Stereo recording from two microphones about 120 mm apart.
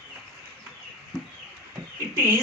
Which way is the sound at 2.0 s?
20° right (ahead or behind).